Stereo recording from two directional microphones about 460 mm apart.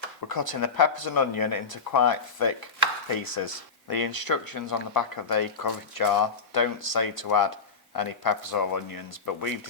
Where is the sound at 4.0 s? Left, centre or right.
Left.